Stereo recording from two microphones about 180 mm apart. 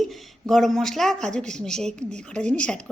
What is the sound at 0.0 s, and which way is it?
Speech, centre (ahead or behind).